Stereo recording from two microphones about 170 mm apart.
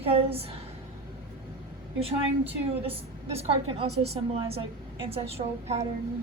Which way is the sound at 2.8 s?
35° right (ahead or behind).